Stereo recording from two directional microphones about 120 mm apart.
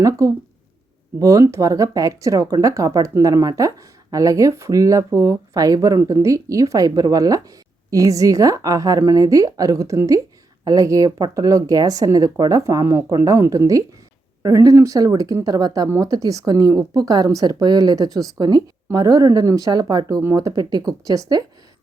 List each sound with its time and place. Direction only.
0.0 s speech: 25° right (ahead or behind)